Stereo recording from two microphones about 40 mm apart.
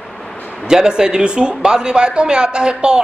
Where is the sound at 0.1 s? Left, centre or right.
Centre.